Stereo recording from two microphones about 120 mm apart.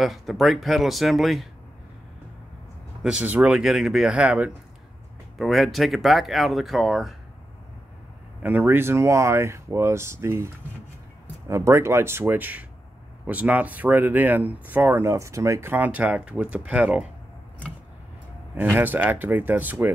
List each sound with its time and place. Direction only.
0.0 s speech: centre (ahead or behind)
3.0 s speech: 10° right (ahead or behind)
5.4 s speech: centre (ahead or behind)
8.4 s speech: 15° right (ahead or behind)
18.6 s speech: 15° right (ahead or behind)